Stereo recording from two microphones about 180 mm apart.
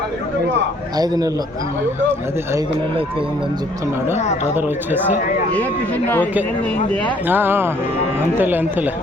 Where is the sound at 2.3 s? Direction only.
15° right (ahead or behind).